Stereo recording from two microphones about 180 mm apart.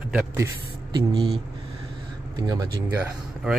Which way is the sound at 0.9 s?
30° right (ahead or behind).